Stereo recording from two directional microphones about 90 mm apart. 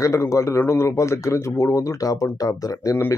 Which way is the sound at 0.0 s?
35° left (ahead or behind).